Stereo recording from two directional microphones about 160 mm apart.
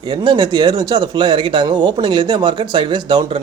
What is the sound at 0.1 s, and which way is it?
A man's voice, 30° right (ahead or behind).